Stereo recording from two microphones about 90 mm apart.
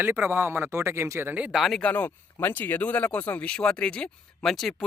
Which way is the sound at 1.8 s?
15° left (ahead or behind).